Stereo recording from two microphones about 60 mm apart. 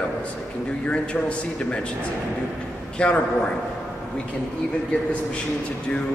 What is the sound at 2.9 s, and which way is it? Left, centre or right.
Speech, centre.